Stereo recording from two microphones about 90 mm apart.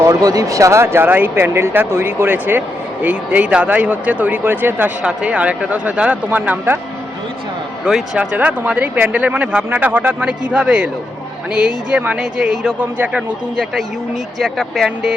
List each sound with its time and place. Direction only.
0.0 s speech: 45° right (ahead or behind); by 6.7 s 20° right (ahead or behind)
7.9 s speech: 5° right (ahead or behind)